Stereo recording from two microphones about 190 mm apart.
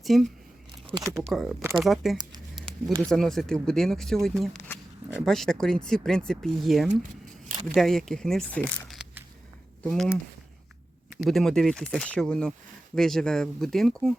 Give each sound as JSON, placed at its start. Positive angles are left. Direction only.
{"t": 0.0, "sound": "speech", "side_deg": 0}
{"t": 0.9, "sound": "speech", "side_deg": -20}
{"t": 1.3, "sound": "speech", "side_deg": 0}
{"t": 2.1, "sound": "a sound", "side_deg": -25}
{"t": 3.0, "sound": "speech", "side_deg": 0}
{"t": 8.9, "sound": "a sound", "side_deg": -5}
{"t": 9.8, "sound": "speech", "side_deg": 0}
{"t": 11.3, "sound": "speech", "side_deg": 0}